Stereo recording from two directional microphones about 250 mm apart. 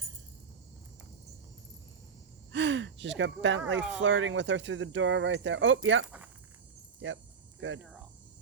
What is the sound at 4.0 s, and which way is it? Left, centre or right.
Speech, right.